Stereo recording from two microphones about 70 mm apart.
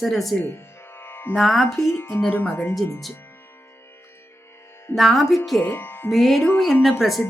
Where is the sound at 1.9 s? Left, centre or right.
Left.